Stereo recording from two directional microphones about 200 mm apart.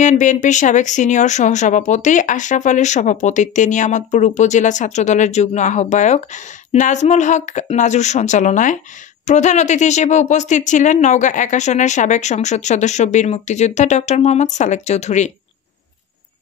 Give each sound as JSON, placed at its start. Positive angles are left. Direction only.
{"t": 0.0, "sound": "speech", "side_deg": 35}